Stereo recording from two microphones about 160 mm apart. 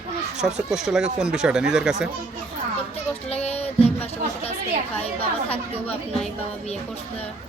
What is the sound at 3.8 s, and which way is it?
Speech, 40° left (ahead or behind).